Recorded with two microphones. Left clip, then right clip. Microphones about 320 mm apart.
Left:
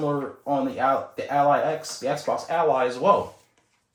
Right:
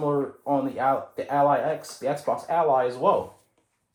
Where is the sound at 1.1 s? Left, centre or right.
Centre.